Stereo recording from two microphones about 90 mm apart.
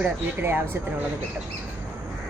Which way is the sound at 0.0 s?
25° right (ahead or behind).